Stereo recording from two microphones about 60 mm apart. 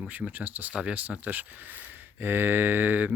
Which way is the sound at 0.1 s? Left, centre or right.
Right.